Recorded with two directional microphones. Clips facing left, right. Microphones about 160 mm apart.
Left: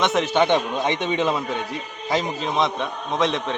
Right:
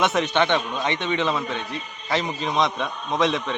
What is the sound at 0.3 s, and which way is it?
A man's voice, 15° left (ahead or behind).